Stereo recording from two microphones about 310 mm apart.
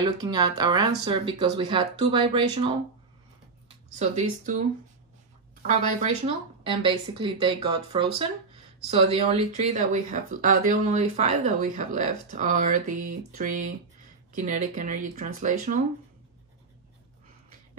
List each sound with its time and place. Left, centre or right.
0.0 s speech: centre
3.6 s speech: right
6.2 s speech: centre